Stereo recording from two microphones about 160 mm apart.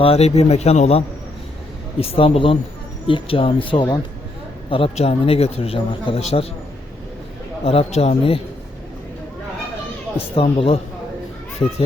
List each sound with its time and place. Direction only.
0.0 s a man's voice: 40° left (ahead or behind)
7.6 s a man's voice: 35° left (ahead or behind)
10.2 s a man's voice: 35° left (ahead or behind)